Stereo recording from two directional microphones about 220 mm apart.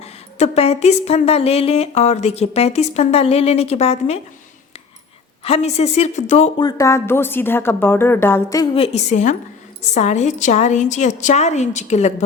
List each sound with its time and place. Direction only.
0.0 s speech: 30° left (ahead or behind)
5.4 s speech: 25° left (ahead or behind)
6.7 s a woman's voice: 15° left (ahead or behind)
8.7 s a woman's voice: 25° left (ahead or behind)